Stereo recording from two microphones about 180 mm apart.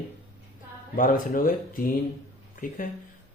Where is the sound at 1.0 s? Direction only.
50° left (ahead or behind).